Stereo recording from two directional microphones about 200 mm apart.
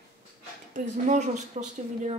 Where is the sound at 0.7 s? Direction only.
40° right (ahead or behind).